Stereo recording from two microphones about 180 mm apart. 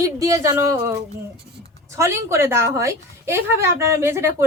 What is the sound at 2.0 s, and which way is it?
A woman's voice, 15° right (ahead or behind).